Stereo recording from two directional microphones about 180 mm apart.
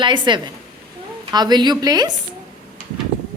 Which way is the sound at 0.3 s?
25° right (ahead or behind).